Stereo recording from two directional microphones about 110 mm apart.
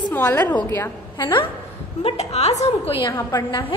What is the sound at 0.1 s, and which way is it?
Speech, 15° left (ahead or behind).